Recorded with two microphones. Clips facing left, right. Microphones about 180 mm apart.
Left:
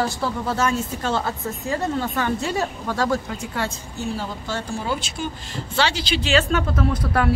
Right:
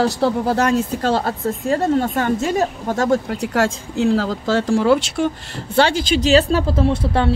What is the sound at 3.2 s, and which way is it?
Speech, 75° right (ahead or behind).